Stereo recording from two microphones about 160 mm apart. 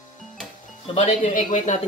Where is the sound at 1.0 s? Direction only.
45° left (ahead or behind).